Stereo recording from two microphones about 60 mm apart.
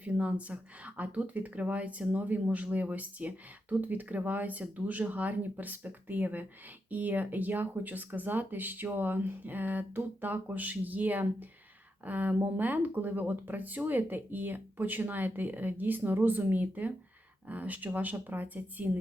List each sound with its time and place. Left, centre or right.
0.0 s speech: right